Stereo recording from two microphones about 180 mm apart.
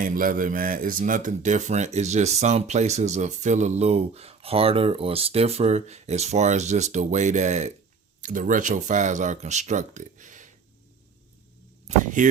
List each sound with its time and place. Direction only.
0.0 s speech: 50° right (ahead or behind)
11.9 s speech: 45° right (ahead or behind)